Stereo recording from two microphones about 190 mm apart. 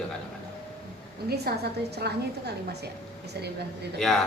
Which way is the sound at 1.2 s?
55° right (ahead or behind).